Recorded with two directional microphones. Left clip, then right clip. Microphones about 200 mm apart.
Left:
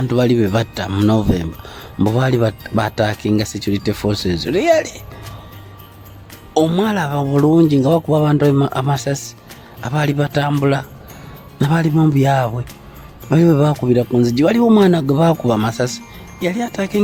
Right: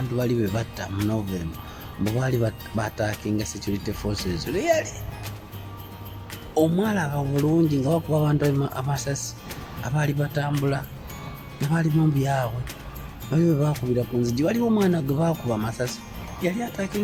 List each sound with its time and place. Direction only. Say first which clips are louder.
0.1 s speech: left 10 dB; 50° left (ahead or behind)
2.1 s speech: left 8 dB; 50° left (ahead or behind)
6.5 s speech: left 7 dB; 55° left (ahead or behind)